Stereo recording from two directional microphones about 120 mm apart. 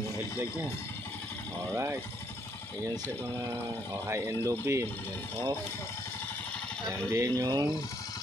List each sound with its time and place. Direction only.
3.9 s speech: 20° right (ahead or behind)
7.1 s speech: 25° right (ahead or behind)